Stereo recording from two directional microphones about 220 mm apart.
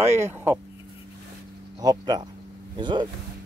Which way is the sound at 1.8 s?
20° right (ahead or behind).